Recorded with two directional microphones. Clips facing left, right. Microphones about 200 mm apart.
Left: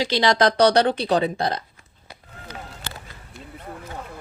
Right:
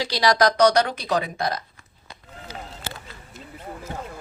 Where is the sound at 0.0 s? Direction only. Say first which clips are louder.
Left 1 dB; 25° left (ahead or behind).